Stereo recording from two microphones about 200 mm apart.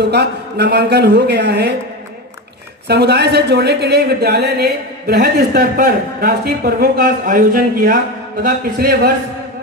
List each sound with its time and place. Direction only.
0.0 s a man's voice: 55° right (ahead or behind)
2.9 s a woman's voice: 55° right (ahead or behind)